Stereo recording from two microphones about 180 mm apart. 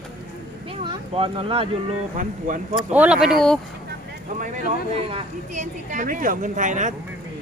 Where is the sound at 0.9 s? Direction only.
30° right (ahead or behind).